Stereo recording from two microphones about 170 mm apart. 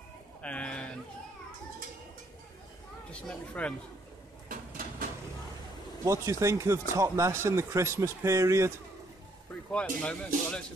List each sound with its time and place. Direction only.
0.4 s a sound: 5° left (ahead or behind)
3.1 s speech: 5° left (ahead or behind)
6.0 s speech: 15° right (ahead or behind)
9.7 s speech: 5° left (ahead or behind)